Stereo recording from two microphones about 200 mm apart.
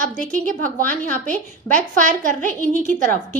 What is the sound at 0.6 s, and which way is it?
A woman's voice, 5° left (ahead or behind).